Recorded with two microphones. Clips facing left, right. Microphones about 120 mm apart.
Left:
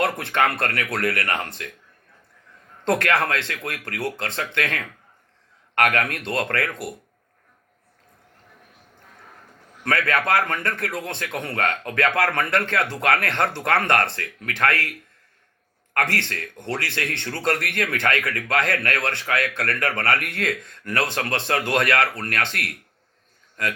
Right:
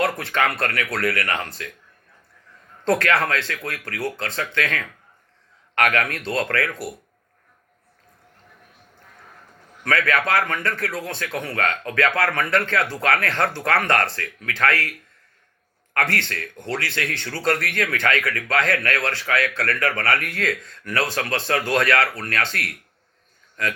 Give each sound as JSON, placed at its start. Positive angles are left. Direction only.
{"t": 0.0, "sound": "speech", "side_deg": 25}
{"t": 2.8, "sound": "speech", "side_deg": 20}
{"t": 9.8, "sound": "speech", "side_deg": 25}
{"t": 16.3, "sound": "speech", "side_deg": 20}